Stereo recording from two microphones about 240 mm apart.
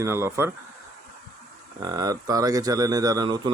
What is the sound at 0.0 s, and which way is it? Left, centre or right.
Speech, centre.